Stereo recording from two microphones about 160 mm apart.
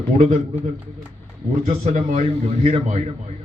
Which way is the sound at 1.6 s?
40° right (ahead or behind).